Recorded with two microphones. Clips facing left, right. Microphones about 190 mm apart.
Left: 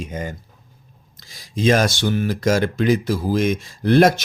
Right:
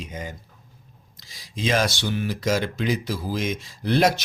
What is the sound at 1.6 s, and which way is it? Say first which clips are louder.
Speech: left 6 dB; 45° left (ahead or behind).